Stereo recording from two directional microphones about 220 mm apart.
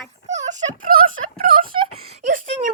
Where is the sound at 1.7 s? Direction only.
25° right (ahead or behind).